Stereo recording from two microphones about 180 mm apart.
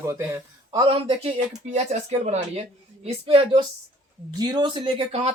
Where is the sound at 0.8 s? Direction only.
30° right (ahead or behind).